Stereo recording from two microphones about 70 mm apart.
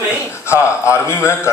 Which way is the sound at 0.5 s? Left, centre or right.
Left.